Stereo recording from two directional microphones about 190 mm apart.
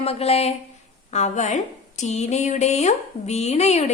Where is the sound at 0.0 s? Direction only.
30° left (ahead or behind).